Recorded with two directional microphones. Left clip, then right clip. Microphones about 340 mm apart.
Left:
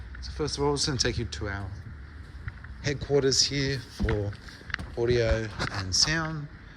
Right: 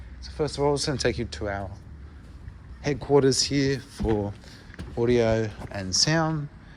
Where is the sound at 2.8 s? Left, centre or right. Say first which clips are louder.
Right 4 dB; centre.